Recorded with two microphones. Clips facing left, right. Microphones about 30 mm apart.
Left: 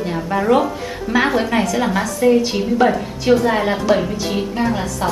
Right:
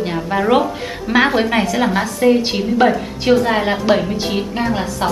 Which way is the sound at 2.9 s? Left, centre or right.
Centre.